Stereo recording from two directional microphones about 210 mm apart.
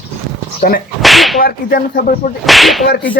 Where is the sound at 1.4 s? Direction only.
45° left (ahead or behind).